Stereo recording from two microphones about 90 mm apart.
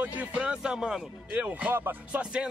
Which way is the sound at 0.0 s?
15° right (ahead or behind).